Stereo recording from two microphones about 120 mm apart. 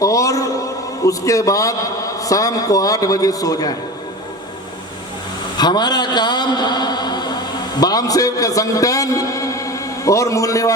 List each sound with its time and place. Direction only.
0.0 s a man's voice: 25° left (ahead or behind)
5.5 s a man's voice: 35° left (ahead or behind)